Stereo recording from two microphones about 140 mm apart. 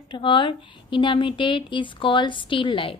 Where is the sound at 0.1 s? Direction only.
35° left (ahead or behind).